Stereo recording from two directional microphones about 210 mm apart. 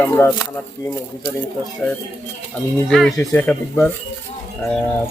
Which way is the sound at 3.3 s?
10° left (ahead or behind).